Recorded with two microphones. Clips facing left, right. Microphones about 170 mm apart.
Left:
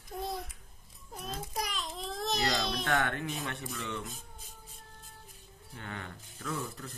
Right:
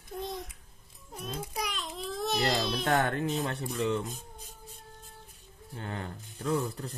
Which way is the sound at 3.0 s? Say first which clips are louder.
Right 5 dB; 35° right (ahead or behind).